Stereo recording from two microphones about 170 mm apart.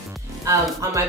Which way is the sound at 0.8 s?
20° right (ahead or behind).